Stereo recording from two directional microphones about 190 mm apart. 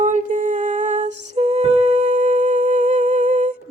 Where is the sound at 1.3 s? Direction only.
35° right (ahead or behind).